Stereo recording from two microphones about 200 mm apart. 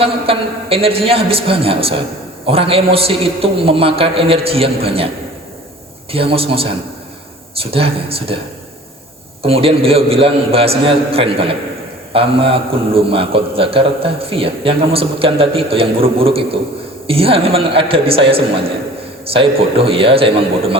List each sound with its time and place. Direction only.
0.0 s a man's voice: 30° right (ahead or behind)
6.1 s a man's voice: 30° right (ahead or behind)
9.4 s a man's voice: 30° right (ahead or behind)